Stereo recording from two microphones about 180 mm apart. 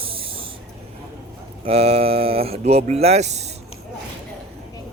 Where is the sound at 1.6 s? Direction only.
35° right (ahead or behind).